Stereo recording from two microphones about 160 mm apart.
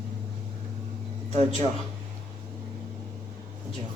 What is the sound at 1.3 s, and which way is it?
Speech, 45° right (ahead or behind).